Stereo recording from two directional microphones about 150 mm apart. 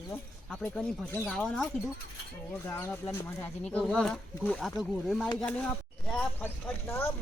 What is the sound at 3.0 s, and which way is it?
Speech, 20° left (ahead or behind).